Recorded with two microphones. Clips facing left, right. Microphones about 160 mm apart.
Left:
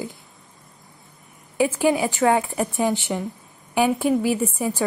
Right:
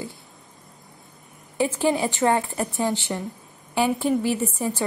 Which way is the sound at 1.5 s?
10° left (ahead or behind).